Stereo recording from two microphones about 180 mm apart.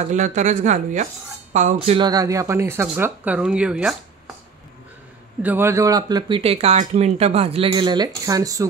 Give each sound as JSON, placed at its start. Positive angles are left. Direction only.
{"t": 0.1, "sound": "speech", "side_deg": -40}
{"t": 2.0, "sound": "speech", "side_deg": -20}
{"t": 5.4, "sound": "speech", "side_deg": -10}